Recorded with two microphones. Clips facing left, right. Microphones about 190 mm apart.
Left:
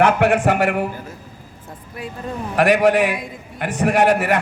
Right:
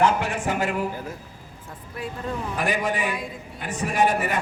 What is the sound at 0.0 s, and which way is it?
Speech, 70° left (ahead or behind).